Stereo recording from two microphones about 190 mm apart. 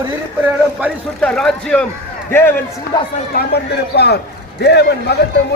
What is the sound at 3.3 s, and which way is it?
A man's voice, 60° left (ahead or behind).